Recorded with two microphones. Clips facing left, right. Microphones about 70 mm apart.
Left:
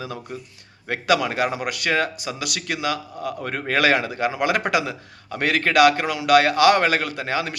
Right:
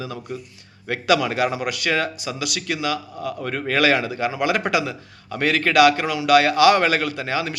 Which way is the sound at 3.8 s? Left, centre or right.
Left.